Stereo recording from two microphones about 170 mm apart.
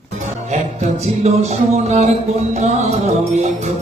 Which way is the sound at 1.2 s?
40° right (ahead or behind).